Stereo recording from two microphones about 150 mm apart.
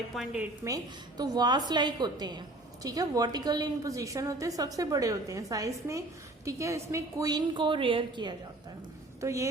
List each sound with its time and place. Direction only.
0.1 s a woman's voice: 5° right (ahead or behind)
0.6 s a woman's voice: 25° right (ahead or behind)
9.2 s a woman's voice: 20° right (ahead or behind)